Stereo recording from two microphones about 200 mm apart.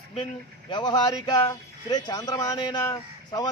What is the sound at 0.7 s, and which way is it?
Speech, 20° left (ahead or behind).